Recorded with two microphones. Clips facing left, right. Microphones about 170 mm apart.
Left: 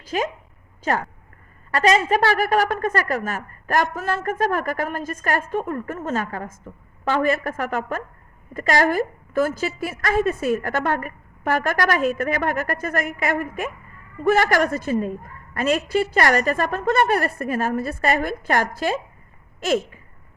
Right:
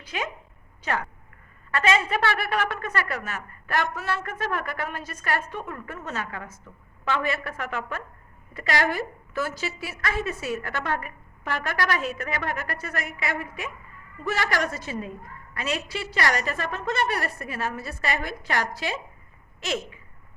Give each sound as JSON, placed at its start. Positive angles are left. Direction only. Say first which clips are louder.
{"t": 0.1, "sound": "a woman's voice", "louder": "left 8 dB", "side_deg": 40}
{"t": 1.7, "sound": "a woman's voice", "louder": "left 5 dB", "side_deg": 40}